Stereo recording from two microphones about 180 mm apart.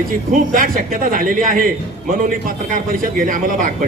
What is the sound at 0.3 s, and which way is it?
A man's voice, 50° right (ahead or behind).